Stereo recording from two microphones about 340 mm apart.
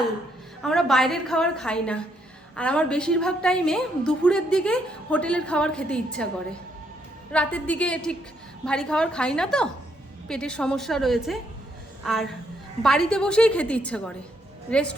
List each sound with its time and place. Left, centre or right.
0.6 s a woman's voice: centre
7.3 s a woman's voice: centre